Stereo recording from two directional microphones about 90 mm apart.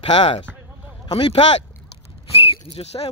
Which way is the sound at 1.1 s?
90° left.